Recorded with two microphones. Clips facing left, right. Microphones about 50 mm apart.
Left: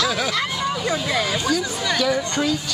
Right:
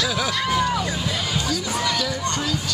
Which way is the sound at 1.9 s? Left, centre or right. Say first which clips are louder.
Left 6 dB; left.